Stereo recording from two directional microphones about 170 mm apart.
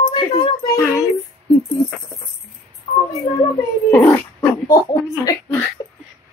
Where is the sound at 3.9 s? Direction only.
15° left (ahead or behind).